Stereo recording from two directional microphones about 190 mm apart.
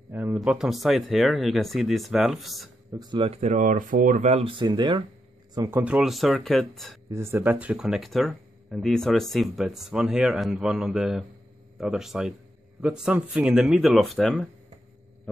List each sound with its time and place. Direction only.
0.1 s speech: 5° right (ahead or behind)
2.9 s speech: 20° right (ahead or behind)
5.5 s speech: 15° right (ahead or behind)
7.1 s speech: 15° right (ahead or behind); by 14.5 s 5° left (ahead or behind)